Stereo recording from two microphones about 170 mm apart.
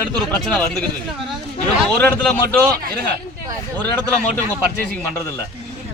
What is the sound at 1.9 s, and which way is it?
Speech, 10° left (ahead or behind).